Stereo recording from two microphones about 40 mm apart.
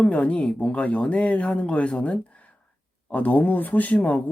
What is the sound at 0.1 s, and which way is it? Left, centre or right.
Speech, left.